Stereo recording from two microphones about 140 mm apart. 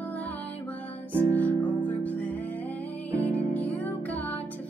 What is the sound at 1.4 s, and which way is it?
Music, 10° left (ahead or behind).